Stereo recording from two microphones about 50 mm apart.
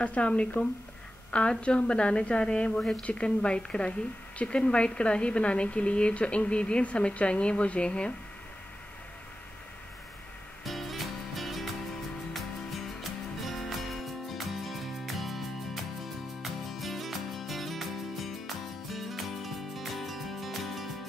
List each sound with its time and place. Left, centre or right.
0.0 s a woman's voice: left
10.6 s music: centre